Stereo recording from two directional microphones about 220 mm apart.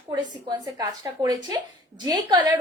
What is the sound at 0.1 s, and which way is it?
A woman's voice, 20° right (ahead or behind).